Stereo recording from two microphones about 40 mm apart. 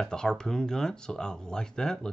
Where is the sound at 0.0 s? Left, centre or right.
Centre.